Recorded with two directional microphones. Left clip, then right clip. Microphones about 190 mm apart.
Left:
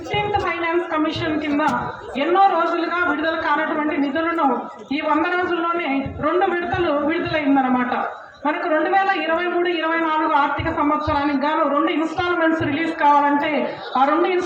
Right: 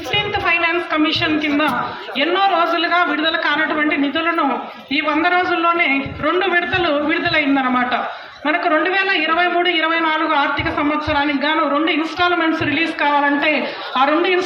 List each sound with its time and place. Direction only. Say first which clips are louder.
0.1 s a sound: right 4 dB; 35° left (ahead or behind)
2.1 s a man's voice: even; 35° left (ahead or behind)
6.2 s a man's voice: right 2 dB; 35° left (ahead or behind)